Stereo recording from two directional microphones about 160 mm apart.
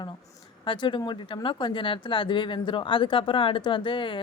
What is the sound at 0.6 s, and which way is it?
Speech, 30° left (ahead or behind).